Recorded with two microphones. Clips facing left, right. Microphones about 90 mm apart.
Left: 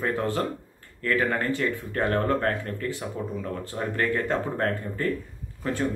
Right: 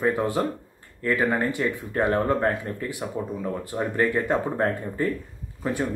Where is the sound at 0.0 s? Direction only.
15° right (ahead or behind).